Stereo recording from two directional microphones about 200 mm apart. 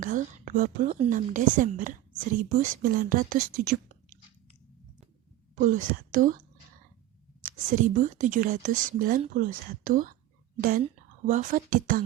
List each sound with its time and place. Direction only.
0.0 s a woman's voice: 40° right (ahead or behind)
5.5 s a woman's voice: 40° right (ahead or behind)
7.4 s a woman's voice: 40° right (ahead or behind)